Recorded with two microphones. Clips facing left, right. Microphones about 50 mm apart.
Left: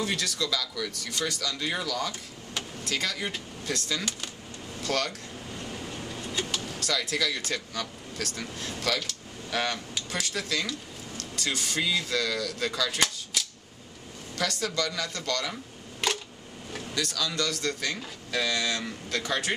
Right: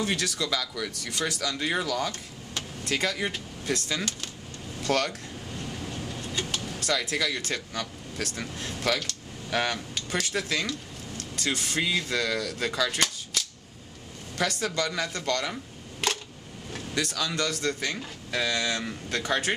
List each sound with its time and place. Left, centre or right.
0.0 s speech: centre
0.5 s speech: centre
5.5 s vehicle: centre
6.9 s speech: centre
9.9 s a sound: centre
10.3 s speech: centre
13.0 s cap gun: centre
14.3 s speech: centre